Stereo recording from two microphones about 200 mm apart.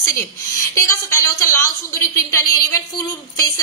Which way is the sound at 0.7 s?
15° left (ahead or behind).